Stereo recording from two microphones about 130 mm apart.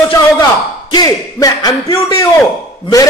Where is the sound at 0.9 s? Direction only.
30° left (ahead or behind).